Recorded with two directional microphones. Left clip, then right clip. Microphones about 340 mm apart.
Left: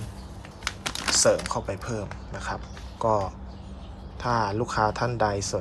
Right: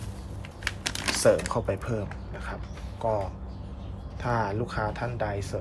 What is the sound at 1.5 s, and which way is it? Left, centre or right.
Speech, centre.